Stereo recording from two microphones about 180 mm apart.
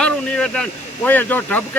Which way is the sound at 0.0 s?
5° left (ahead or behind).